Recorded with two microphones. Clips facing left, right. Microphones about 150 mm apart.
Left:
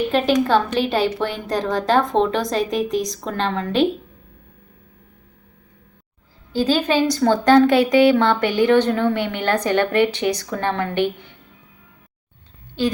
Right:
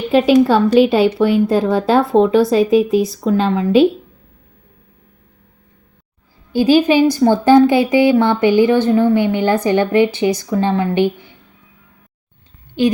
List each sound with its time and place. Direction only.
0.4 s a woman's voice: 10° right (ahead or behind)
6.5 s a woman's voice: 15° right (ahead or behind)
12.8 s a woman's voice: 15° right (ahead or behind)